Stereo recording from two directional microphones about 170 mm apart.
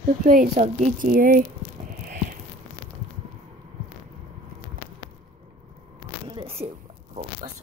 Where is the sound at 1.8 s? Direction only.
55° right (ahead or behind).